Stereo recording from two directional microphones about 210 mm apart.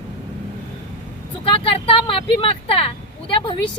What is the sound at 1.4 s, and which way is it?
Speech, 25° left (ahead or behind).